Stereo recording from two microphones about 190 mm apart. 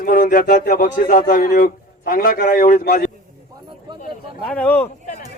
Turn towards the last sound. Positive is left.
turn(degrees=10)  # may be behind; listen again after turning